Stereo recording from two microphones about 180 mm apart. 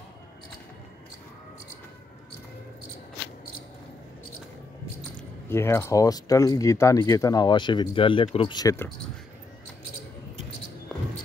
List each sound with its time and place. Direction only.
5.5 s speech: 15° left (ahead or behind)